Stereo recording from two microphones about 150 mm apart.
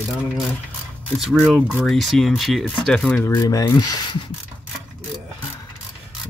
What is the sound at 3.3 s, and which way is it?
Speech, 25° left (ahead or behind).